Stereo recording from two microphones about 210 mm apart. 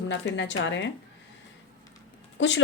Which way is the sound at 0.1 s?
60° left (ahead or behind).